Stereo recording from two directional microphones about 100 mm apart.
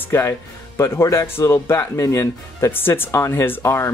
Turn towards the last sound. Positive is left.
turn(degrees=25)  # may be behind; listen again after turning